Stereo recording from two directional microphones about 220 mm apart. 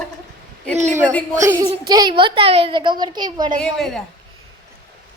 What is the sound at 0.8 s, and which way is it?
Speech, 30° right (ahead or behind).